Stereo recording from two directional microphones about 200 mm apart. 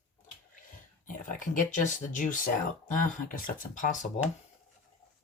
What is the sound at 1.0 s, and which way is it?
Speech, 40° left (ahead or behind).